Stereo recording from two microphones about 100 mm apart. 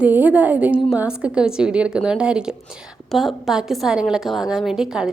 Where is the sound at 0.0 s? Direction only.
15° right (ahead or behind).